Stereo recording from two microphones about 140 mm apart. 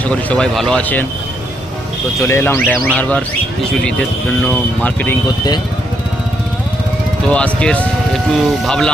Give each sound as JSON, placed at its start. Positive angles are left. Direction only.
{"t": 0.0, "sound": "speech", "side_deg": 10}
{"t": 2.2, "sound": "speech", "side_deg": 15}
{"t": 7.3, "sound": "speech", "side_deg": 10}